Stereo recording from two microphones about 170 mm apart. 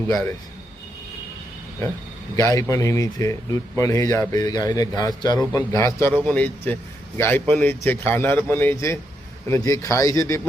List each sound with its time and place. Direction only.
2.3 s a man's voice: 20° left (ahead or behind)